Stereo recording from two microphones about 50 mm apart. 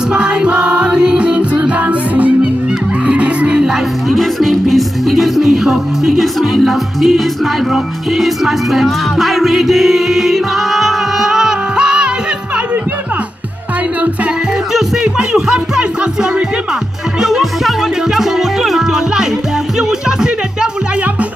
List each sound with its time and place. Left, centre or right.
0.1 s music: centre
4.2 s music: centre
15.1 s music: centre
17.2 s music: centre